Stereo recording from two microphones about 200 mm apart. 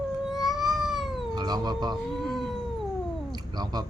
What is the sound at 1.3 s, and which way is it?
Speech, 20° right (ahead or behind).